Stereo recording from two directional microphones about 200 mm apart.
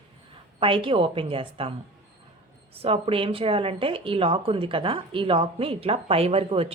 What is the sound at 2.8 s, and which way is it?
Speech, 30° right (ahead or behind).